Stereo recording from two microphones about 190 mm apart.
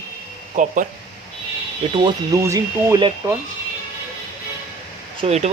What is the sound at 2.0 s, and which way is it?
Speech, 15° right (ahead or behind).